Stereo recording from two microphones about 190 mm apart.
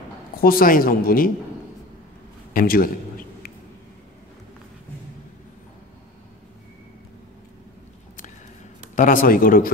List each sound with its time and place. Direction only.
0.4 s speech: 50° left (ahead or behind)
2.5 s a sound: 50° left (ahead or behind)
8.9 s speech: 45° left (ahead or behind)